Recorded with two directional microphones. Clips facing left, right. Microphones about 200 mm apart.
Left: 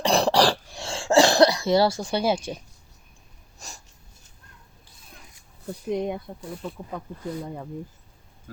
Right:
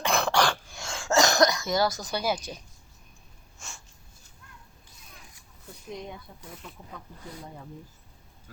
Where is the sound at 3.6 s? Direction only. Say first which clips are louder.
Left 3 dB; 40° left (ahead or behind).